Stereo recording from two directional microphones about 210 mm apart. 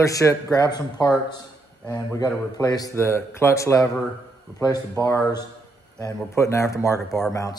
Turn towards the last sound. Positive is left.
turn(degrees=15)  # may be behind; listen again after turning